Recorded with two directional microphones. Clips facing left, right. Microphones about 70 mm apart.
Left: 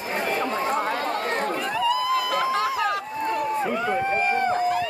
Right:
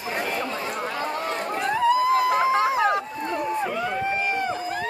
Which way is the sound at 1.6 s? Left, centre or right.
Right.